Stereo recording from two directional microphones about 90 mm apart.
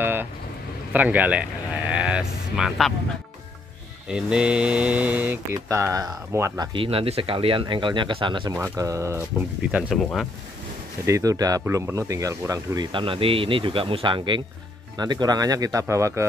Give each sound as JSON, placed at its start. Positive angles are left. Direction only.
{"t": 0.0, "sound": "vehicle", "side_deg": -25}
{"t": 0.9, "sound": "speech", "side_deg": -20}
{"t": 4.1, "sound": "speech", "side_deg": -10}
{"t": 5.5, "sound": "speech", "side_deg": -30}
{"t": 6.7, "sound": "speech", "side_deg": -85}
{"t": 7.6, "sound": "speech", "side_deg": -60}
{"t": 8.7, "sound": "speech", "side_deg": -35}
{"t": 9.6, "sound": "speech", "side_deg": -10}
{"t": 11.1, "sound": "speech", "side_deg": -35}
{"t": 11.6, "sound": "speech", "side_deg": -30}
{"t": 12.9, "sound": "speech", "side_deg": -80}
{"t": 15.0, "sound": "speech", "side_deg": -50}